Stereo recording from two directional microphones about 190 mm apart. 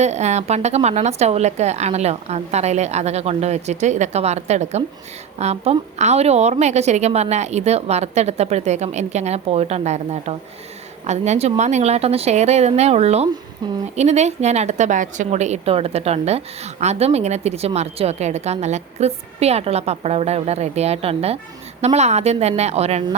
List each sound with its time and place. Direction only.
0.0 s a woman's voice: 35° right (ahead or behind)